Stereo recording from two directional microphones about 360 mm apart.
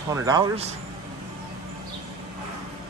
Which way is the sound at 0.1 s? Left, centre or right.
Centre.